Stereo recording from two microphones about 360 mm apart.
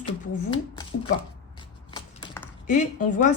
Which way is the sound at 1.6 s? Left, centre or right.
Centre.